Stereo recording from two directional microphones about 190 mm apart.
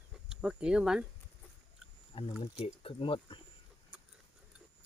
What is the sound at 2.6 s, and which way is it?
Speech, 30° left (ahead or behind).